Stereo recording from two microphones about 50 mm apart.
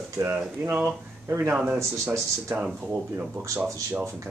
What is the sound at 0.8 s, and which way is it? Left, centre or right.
Speech, right.